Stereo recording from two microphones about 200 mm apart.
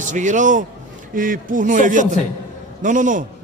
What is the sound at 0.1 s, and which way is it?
A man's voice, 40° right (ahead or behind).